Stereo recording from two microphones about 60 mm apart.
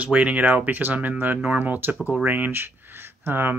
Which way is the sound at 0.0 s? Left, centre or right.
Right.